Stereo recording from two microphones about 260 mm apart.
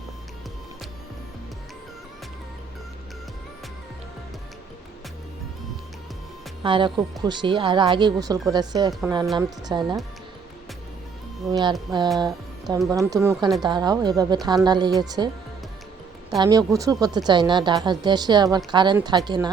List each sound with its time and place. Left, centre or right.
6.6 s speech: centre
11.4 s speech: centre
16.4 s speech: centre